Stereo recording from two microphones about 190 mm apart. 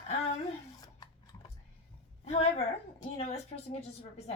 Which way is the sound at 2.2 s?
35° left (ahead or behind).